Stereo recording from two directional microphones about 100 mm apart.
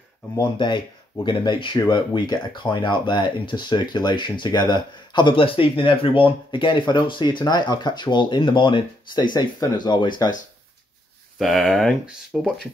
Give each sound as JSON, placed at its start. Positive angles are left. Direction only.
{"t": 0.4, "sound": "speech", "side_deg": 45}
{"t": 11.3, "sound": "speech", "side_deg": 0}